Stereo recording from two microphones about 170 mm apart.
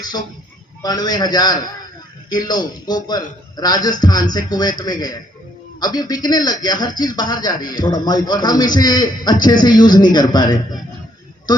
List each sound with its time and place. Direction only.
0.0 s speech: 25° left (ahead or behind)